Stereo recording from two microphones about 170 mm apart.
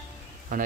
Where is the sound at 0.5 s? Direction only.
50° right (ahead or behind).